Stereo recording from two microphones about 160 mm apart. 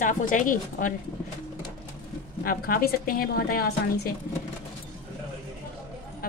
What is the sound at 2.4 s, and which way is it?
A woman's voice, 65° left (ahead or behind).